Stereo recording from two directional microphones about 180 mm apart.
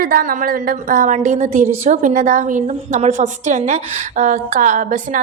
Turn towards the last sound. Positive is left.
turn(degrees=-45)  # may be behind; listen again after turning